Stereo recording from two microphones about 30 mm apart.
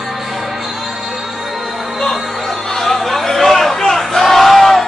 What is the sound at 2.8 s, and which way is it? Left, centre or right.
Chatter, centre.